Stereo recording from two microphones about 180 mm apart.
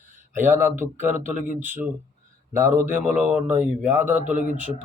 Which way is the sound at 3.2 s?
10° right (ahead or behind).